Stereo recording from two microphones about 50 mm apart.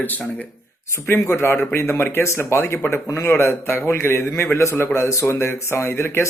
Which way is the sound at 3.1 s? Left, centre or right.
Left.